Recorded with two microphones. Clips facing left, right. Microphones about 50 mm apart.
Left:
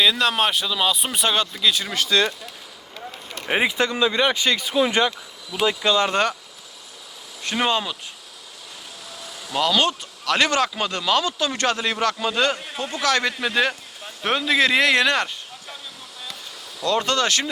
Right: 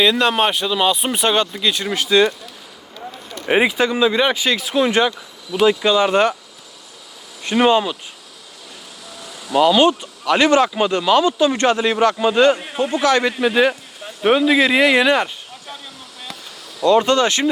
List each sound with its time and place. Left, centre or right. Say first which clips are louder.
0.0 s speech: right 4 dB; centre
3.5 s speech: right 5 dB; centre
4.4 s speech: right 2 dB; right
5.6 s speech: right 5 dB; centre
7.4 s speech: right 7 dB; centre
9.6 s speech: right 7 dB; centre
12.5 s speech: right 8 dB; right; by 15.3 s centre
16.8 s speech: right 7 dB; centre